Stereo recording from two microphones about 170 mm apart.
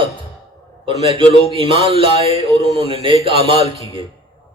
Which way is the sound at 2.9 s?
30° right (ahead or behind).